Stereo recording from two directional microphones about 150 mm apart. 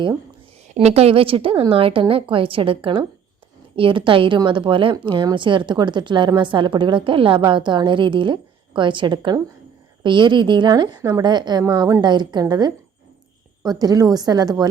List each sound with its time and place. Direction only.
0.7 s a woman's voice: 50° right (ahead or behind); by 14.7 s 25° right (ahead or behind)